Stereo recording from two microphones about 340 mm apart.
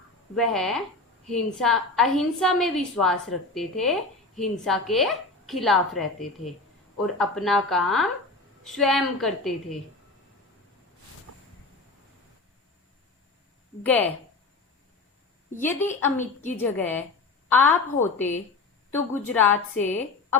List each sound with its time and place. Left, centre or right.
0.3 s a woman's voice: centre
13.8 s a woman's voice: centre
15.5 s a woman's voice: centre
16.1 s a woman's voice: left
16.6 s a woman's voice: centre